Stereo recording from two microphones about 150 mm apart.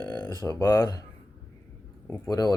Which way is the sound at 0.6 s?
25° left (ahead or behind).